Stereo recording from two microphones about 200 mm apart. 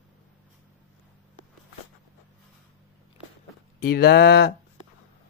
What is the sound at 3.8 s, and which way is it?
Mantra, 50° left (ahead or behind).